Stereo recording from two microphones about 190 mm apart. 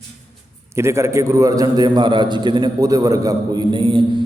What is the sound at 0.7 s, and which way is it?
A man's voice, 15° right (ahead or behind).